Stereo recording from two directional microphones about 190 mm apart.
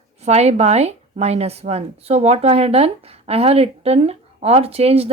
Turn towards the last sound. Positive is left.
turn(degrees=-30)  # may be behind; listen again after turning